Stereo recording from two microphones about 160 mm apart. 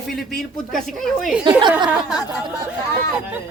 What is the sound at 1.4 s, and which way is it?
Speech, 30° right (ahead or behind).